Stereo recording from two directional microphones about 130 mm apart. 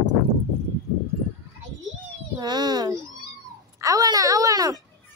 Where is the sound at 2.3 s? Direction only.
35° right (ahead or behind).